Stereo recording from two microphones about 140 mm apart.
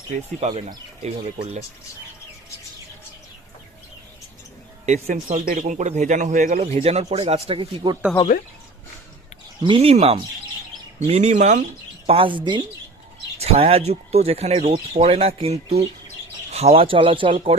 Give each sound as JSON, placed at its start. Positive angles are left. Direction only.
{"t": 0.3, "sound": "speech", "side_deg": -45}
{"t": 4.9, "sound": "speech", "side_deg": -60}
{"t": 9.6, "sound": "speech", "side_deg": -45}
{"t": 11.1, "sound": "speech", "side_deg": -55}
{"t": 12.0, "sound": "speech", "side_deg": -40}
{"t": 13.4, "sound": "speech", "side_deg": -45}